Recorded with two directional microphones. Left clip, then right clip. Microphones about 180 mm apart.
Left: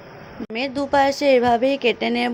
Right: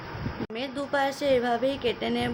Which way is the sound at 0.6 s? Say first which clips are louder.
Left 9 dB; 40° left (ahead or behind).